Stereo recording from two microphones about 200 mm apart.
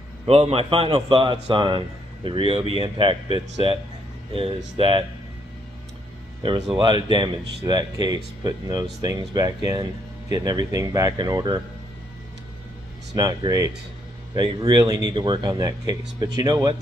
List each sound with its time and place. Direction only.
0.3 s a man's voice: 30° right (ahead or behind)
6.4 s a man's voice: 25° right (ahead or behind)
13.1 s a man's voice: 20° right (ahead or behind)